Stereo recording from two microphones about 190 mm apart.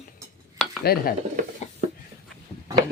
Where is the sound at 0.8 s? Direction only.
55° left (ahead or behind).